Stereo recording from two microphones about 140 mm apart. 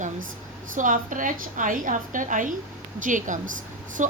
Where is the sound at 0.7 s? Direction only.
70° right (ahead or behind).